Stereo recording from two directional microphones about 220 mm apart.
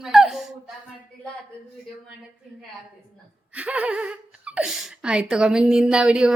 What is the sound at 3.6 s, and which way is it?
Speech, 5° right (ahead or behind).